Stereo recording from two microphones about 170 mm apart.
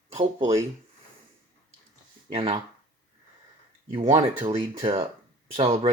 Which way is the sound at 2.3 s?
35° right (ahead or behind).